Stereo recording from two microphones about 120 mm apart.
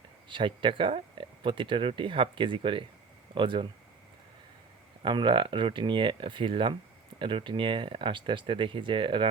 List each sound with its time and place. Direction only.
0.3 s speech: 45° right (ahead or behind)
5.0 s speech: 40° right (ahead or behind)